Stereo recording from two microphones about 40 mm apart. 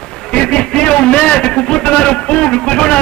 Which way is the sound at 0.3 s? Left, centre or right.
Left.